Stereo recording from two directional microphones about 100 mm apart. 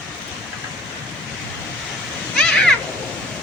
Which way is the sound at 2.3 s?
10° left (ahead or behind).